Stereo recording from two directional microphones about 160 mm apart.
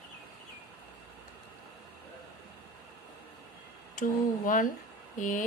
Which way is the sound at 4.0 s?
60° left (ahead or behind).